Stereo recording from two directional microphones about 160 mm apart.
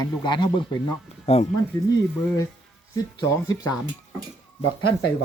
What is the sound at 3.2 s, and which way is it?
Speech, 20° left (ahead or behind).